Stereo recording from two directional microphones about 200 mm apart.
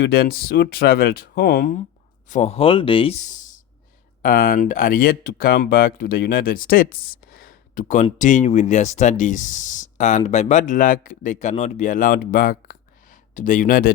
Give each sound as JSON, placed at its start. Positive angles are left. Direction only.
{"t": 0.0, "sound": "speech", "side_deg": 50}
{"t": 2.3, "sound": "speech", "side_deg": 30}